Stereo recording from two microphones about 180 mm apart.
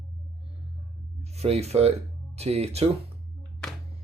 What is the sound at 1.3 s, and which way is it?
Speech, 35° right (ahead or behind).